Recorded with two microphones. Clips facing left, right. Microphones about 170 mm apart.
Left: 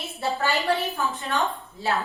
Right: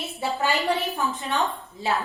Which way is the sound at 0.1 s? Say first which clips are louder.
Even; 15° right (ahead or behind).